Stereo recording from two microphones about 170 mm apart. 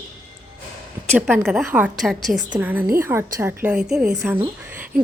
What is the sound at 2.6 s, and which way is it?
A woman's voice, 10° right (ahead or behind).